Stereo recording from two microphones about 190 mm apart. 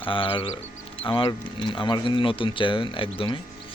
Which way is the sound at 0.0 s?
25° left (ahead or behind).